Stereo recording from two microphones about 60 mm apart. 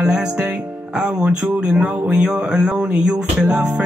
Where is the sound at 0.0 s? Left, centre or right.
Centre.